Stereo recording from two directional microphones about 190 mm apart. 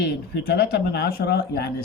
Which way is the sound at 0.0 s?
60° left (ahead or behind).